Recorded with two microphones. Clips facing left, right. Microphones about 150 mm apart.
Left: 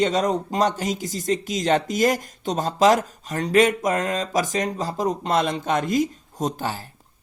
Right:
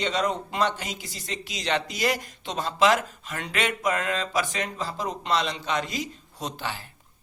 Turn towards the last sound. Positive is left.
turn(degrees=40)  # may be behind; listen again after turning